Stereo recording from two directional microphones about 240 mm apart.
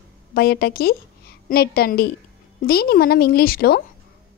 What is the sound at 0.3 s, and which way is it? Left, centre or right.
A woman's voice, left.